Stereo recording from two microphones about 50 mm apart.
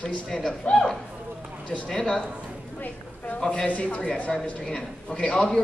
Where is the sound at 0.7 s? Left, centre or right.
Centre.